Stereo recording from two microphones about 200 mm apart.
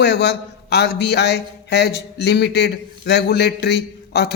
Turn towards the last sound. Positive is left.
turn(degrees=55)  # may be behind; listen again after turning